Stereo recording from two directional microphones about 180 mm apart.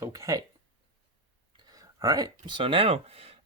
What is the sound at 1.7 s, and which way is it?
Speech, 20° right (ahead or behind).